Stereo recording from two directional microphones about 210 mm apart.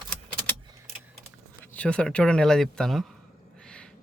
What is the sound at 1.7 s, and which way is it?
Speech, 5° left (ahead or behind).